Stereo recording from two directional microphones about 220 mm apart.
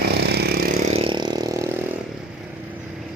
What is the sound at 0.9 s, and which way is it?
Vehicle, 25° right (ahead or behind).